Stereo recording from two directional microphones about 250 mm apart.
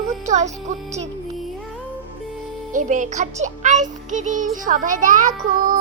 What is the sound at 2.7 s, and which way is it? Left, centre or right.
A child's voice, right.